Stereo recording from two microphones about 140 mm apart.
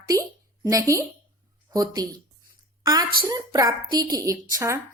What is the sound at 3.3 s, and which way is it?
A woman's voice, 25° right (ahead or behind).